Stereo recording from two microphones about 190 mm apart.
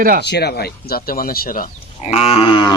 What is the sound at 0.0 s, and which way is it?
Speech, 50° right (ahead or behind).